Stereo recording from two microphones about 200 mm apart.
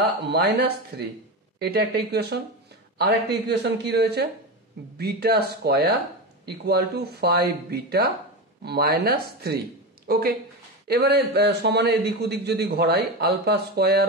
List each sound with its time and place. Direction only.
0.3 s a man's voice: 55° right (ahead or behind)
10.9 s a man's voice: 55° right (ahead or behind)